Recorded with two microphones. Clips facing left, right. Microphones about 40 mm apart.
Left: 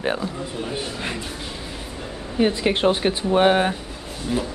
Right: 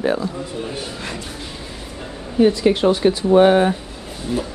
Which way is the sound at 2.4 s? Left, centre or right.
Left.